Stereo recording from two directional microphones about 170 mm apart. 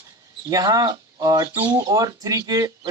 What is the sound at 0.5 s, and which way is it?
Speech, 20° right (ahead or behind).